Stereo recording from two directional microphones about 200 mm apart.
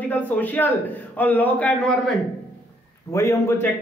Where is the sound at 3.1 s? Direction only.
15° left (ahead or behind).